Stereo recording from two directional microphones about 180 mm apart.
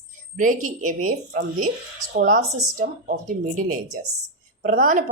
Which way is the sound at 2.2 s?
50° right (ahead or behind).